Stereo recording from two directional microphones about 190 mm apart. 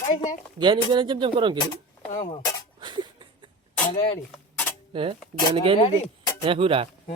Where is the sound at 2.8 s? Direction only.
25° right (ahead or behind).